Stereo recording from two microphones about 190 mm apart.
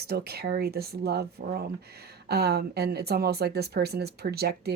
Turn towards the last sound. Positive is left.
turn(degrees=-55)  # may be behind; listen again after turning